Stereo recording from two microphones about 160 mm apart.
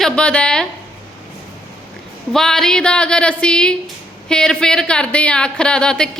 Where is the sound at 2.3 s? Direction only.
5° left (ahead or behind).